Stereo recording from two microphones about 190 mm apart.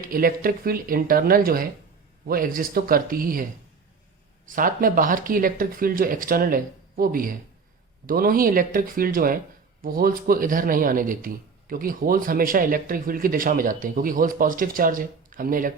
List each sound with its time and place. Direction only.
0.1 s speech: 50° right (ahead or behind)
4.4 s speech: 45° right (ahead or behind)